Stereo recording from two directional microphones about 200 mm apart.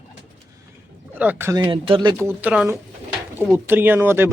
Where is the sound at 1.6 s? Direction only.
25° right (ahead or behind).